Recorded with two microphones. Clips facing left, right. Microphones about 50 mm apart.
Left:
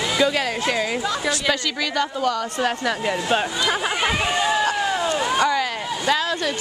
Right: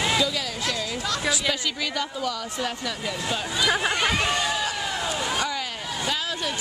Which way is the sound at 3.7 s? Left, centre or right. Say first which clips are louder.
Right 1 dB; centre.